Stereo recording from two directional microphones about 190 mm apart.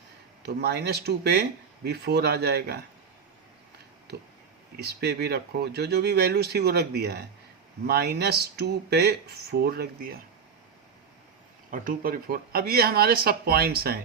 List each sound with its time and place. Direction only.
0.4 s speech: 60° right (ahead or behind)
4.8 s speech: 60° right (ahead or behind)
11.7 s speech: 45° right (ahead or behind)